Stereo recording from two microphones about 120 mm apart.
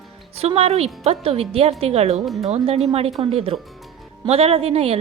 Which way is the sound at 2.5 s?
60° right (ahead or behind).